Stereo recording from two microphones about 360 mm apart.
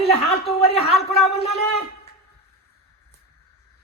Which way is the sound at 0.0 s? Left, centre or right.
Centre.